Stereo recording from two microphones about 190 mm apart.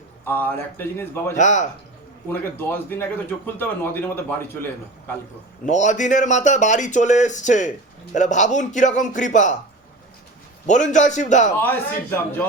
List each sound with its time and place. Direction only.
0.3 s speech: 10° left (ahead or behind)
1.4 s speech: 40° left (ahead or behind)
2.3 s speech: 10° left (ahead or behind)
5.6 s speech: 40° left (ahead or behind)
10.7 s speech: 40° left (ahead or behind)
11.6 s speech: 10° left (ahead or behind)